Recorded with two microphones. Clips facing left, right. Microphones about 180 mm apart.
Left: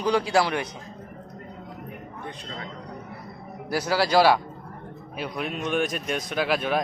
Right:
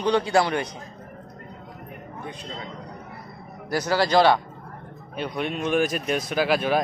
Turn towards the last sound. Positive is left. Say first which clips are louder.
# right 3 dB
turn(degrees=0)  # may be behind; listen again after turning